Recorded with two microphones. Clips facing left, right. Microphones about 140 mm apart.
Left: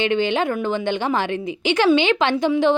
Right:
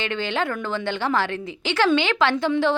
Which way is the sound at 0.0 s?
20° left (ahead or behind).